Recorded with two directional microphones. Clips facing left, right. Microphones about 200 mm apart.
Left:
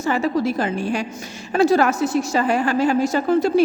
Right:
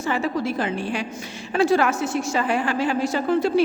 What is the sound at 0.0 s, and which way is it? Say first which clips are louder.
A woman's voice: left 4 dB; 40° left (ahead or behind).